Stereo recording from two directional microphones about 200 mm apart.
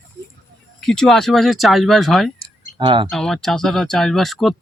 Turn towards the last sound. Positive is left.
turn(degrees=0)  # may be behind; listen again after turning